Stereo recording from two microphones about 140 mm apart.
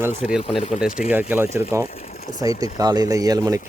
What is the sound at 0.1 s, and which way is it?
Speech, 60° left (ahead or behind).